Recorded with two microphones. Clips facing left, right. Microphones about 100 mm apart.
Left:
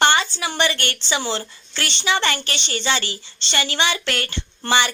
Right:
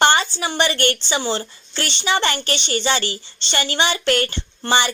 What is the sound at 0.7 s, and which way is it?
Speech, 40° right (ahead or behind).